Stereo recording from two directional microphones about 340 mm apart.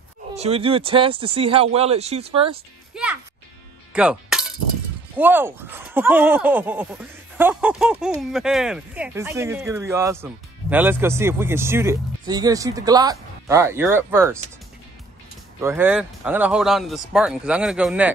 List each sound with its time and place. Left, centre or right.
0.4 s speech: centre
2.9 s music: centre
5.1 s speech: centre
15.6 s speech: centre